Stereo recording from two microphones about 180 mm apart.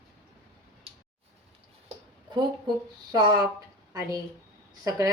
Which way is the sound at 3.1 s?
20° right (ahead or behind).